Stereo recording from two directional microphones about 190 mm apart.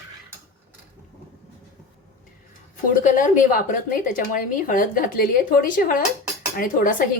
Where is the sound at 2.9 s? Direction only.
45° left (ahead or behind).